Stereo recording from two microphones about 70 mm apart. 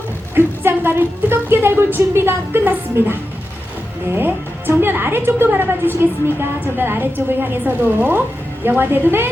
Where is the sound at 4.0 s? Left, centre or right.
Right.